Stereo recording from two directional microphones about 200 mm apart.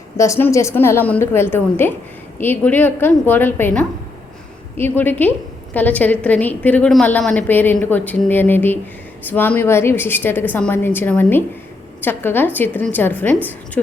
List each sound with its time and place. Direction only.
0.2 s a woman's voice: 15° left (ahead or behind)